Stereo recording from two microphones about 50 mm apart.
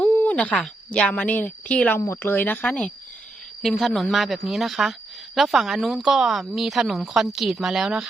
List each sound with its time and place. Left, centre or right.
0.0 s a sound: left
0.3 s speech: left
2.2 s speech: left
3.6 s a woman's voice: centre